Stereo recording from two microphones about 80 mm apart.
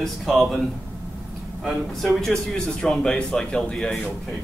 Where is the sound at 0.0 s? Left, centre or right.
Centre.